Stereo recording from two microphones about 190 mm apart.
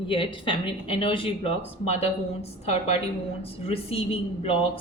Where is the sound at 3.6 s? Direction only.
30° left (ahead or behind).